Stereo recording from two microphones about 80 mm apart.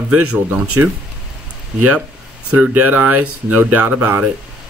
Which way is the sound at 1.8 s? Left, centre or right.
Centre.